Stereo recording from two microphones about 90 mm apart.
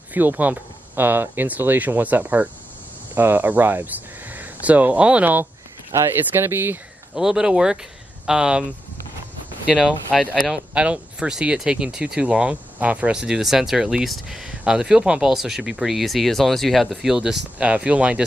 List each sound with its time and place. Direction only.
0.1 s speech: 20° right (ahead or behind)
7.2 s speech: 5° right (ahead or behind)
10.1 s speech: centre (ahead or behind)